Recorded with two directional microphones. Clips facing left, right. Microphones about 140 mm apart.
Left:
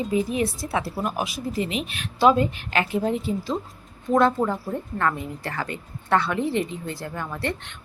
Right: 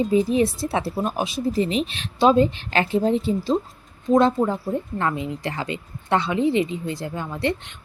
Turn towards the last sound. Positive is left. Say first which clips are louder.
# right 4 dB
turn(degrees=-15)  # may be behind; listen again after turning